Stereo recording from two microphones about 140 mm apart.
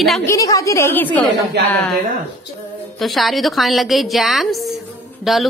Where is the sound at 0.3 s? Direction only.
25° left (ahead or behind).